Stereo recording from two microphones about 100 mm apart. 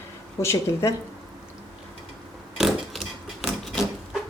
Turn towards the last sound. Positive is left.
turn(degrees=0)  # may be behind; listen again after turning